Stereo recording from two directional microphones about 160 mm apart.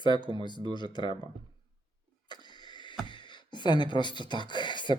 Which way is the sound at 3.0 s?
30° left (ahead or behind).